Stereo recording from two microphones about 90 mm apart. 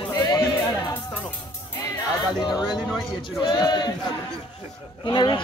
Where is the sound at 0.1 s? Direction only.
50° left (ahead or behind).